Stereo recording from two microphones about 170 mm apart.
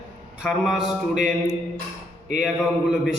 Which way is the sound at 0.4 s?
Centre (ahead or behind).